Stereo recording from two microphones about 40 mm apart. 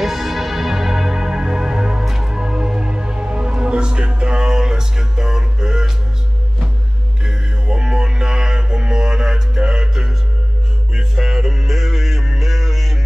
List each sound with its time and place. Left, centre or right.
0.0 s music: centre
7.2 s music: centre